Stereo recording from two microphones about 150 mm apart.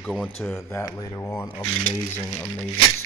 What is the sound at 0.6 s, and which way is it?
Speech, 20° left (ahead or behind).